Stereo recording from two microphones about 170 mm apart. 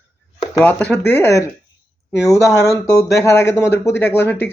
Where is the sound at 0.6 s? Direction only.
10° left (ahead or behind).